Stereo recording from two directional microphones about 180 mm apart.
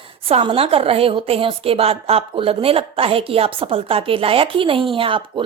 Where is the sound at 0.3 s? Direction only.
30° right (ahead or behind).